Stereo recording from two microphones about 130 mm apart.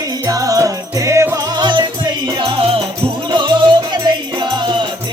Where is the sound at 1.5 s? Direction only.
35° right (ahead or behind).